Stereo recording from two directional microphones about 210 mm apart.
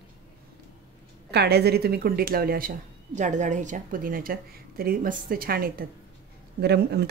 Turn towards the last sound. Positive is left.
turn(degrees=-50)  # may be behind; listen again after turning